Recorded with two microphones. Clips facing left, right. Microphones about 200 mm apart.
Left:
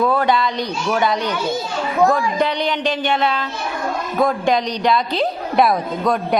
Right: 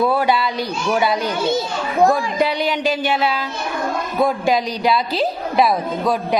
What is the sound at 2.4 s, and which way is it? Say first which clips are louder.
A man's voice: right 1 dB; 5° right (ahead or behind).